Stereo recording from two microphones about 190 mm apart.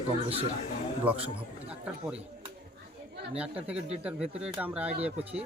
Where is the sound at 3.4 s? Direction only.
5° right (ahead or behind).